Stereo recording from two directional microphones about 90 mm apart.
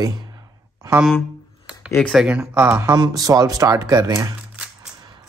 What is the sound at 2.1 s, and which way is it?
Speech, 10° right (ahead or behind).